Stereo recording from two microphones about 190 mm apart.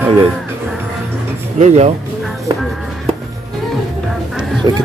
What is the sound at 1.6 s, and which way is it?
Speech, 35° right (ahead or behind).